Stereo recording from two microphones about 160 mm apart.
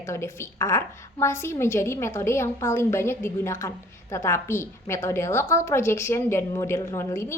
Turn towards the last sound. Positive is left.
turn(degrees=15)  # may be behind; listen again after turning